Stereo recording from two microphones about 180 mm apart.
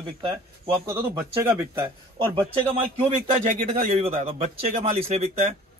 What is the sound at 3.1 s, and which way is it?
A man's voice, 35° right (ahead or behind).